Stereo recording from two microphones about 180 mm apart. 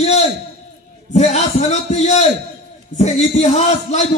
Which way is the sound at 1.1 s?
40° left (ahead or behind).